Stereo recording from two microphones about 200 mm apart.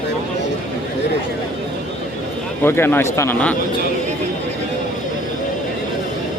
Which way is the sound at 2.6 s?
10° left (ahead or behind).